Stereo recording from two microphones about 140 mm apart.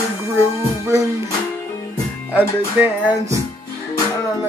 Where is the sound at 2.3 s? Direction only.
15° right (ahead or behind).